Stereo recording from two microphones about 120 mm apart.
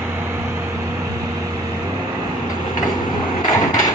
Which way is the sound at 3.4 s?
30° left (ahead or behind).